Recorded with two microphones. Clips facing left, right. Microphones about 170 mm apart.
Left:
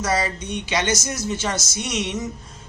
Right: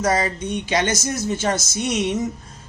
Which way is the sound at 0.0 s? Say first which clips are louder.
Right 3 dB; 50° right (ahead or behind).